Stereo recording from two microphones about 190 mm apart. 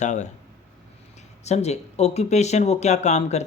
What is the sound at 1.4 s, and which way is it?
Speech, 35° left (ahead or behind).